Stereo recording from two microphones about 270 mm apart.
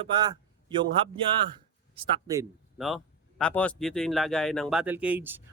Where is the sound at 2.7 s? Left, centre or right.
Centre.